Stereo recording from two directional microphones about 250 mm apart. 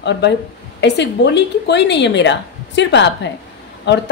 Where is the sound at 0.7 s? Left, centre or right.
Left.